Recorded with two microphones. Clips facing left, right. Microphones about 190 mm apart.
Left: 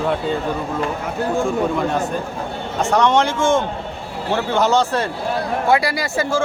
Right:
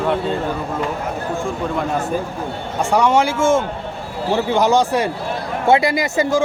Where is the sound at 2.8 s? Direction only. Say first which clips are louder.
Right 1 dB; 10° right (ahead or behind).